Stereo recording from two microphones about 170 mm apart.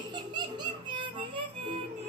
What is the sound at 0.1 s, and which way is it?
Music, 25° right (ahead or behind).